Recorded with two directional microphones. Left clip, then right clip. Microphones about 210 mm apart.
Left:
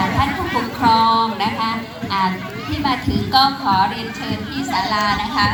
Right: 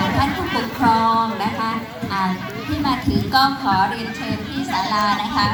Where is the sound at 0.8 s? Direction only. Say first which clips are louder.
Left 2 dB; 50° right (ahead or behind).